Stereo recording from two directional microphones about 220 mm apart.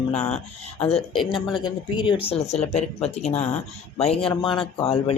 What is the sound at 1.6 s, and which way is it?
Speech, 20° left (ahead or behind).